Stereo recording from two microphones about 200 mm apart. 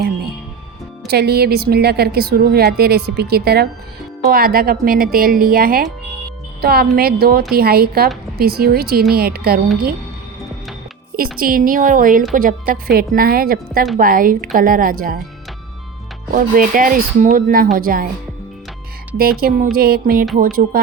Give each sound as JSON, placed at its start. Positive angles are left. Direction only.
{"t": 1.0, "sound": "speech", "side_deg": -55}
{"t": 11.2, "sound": "speech", "side_deg": -45}
{"t": 16.3, "sound": "speech", "side_deg": -45}
{"t": 19.4, "sound": "speech", "side_deg": -45}